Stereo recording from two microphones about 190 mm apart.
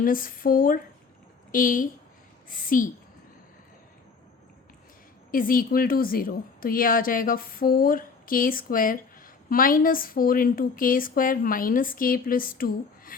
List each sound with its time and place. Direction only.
0.0 s a woman's voice: 45° left (ahead or behind)
5.3 s a woman's voice: 50° left (ahead or behind)